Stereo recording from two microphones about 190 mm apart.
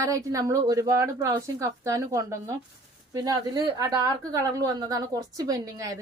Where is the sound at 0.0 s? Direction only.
15° right (ahead or behind).